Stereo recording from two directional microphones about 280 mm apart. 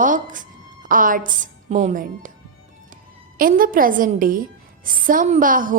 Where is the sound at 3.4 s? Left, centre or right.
Right.